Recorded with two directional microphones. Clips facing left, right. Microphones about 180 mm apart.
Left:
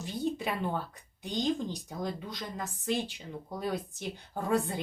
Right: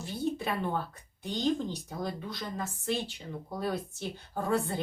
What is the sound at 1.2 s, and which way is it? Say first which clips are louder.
Speech: right 1 dB; 15° left (ahead or behind).